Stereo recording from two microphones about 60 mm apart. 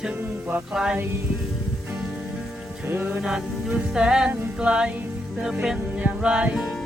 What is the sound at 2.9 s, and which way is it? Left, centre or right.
Music, right.